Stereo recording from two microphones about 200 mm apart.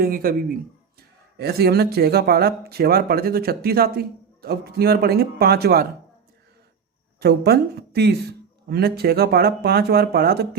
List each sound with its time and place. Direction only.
0.0 s speech: 45° right (ahead or behind)
7.2 s speech: 50° right (ahead or behind)